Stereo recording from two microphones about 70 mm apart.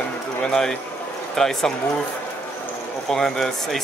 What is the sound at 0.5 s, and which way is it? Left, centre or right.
Speech, centre.